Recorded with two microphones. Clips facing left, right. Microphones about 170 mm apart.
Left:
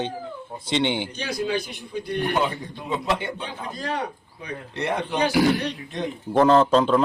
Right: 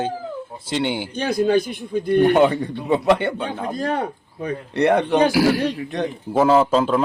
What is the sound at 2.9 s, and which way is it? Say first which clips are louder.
A man's voice: right 8 dB; 65° right (ahead or behind).